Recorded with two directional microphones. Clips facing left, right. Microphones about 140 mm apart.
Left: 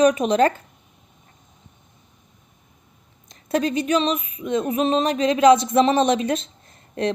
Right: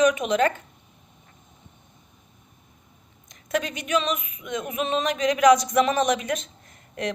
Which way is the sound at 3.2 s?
35° left (ahead or behind).